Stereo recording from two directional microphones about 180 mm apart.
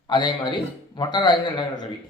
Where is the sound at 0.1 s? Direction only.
25° left (ahead or behind).